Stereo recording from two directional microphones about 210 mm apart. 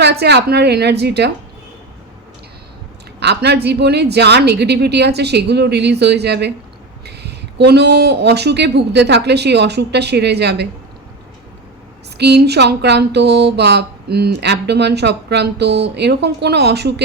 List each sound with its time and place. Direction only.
0.0 s speech: 55° right (ahead or behind)
3.2 s speech: 55° right (ahead or behind)
12.1 s speech: 50° right (ahead or behind)